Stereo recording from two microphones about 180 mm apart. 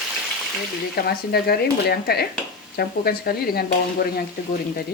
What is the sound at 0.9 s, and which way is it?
Speech, 60° left (ahead or behind).